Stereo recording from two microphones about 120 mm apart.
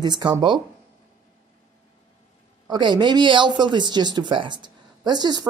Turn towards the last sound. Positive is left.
turn(degrees=-35)  # may be behind; listen again after turning